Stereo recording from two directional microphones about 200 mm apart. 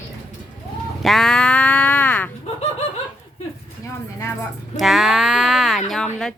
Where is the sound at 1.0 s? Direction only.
Centre (ahead or behind).